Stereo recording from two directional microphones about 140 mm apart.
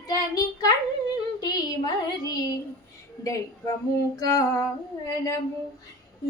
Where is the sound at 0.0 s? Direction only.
25° left (ahead or behind).